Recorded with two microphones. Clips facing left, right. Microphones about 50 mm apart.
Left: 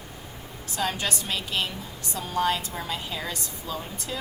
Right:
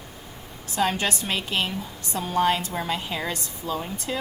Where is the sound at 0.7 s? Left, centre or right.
Right.